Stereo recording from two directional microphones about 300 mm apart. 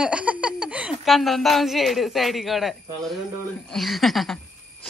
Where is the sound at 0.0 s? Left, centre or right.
Centre.